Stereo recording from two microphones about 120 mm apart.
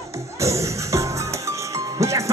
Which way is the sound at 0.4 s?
25° right (ahead or behind).